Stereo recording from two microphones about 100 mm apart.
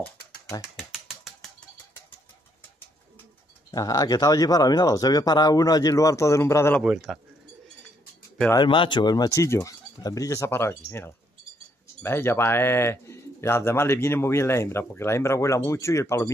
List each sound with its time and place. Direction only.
0.7 s mechanisms: 5° right (ahead or behind)
3.7 s speech: 40° left (ahead or behind)
6.8 s speech: 5° right (ahead or behind)
8.5 s speech: 55° left (ahead or behind); by 16.3 s 30° left (ahead or behind)